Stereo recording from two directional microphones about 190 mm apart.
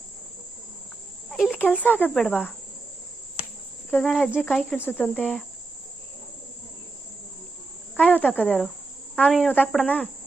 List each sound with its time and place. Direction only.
1.3 s insect: centre (ahead or behind)
1.5 s speech: 10° left (ahead or behind)
3.4 s cricket: 30° left (ahead or behind)
3.9 s speech: 5° left (ahead or behind)
7.9 s speech: 10° left (ahead or behind)